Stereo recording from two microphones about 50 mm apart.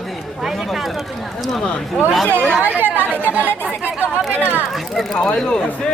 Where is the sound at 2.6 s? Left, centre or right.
Right.